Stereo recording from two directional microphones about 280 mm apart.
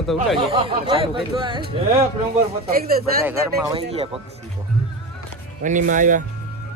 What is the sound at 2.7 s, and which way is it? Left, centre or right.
Speech, right.